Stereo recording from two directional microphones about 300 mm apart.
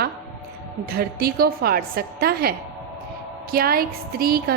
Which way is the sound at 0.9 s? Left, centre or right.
Right.